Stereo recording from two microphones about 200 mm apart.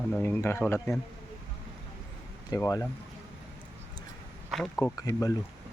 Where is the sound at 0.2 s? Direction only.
10° left (ahead or behind).